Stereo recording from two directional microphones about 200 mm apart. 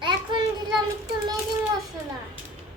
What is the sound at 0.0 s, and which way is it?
Child singing, 25° right (ahead or behind).